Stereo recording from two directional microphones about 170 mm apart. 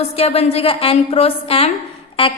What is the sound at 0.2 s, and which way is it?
A woman's voice, 35° left (ahead or behind).